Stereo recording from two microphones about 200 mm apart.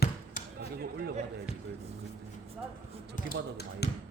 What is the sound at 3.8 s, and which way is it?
Speech, 55° left (ahead or behind).